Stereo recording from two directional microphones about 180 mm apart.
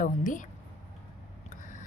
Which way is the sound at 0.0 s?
45° left (ahead or behind).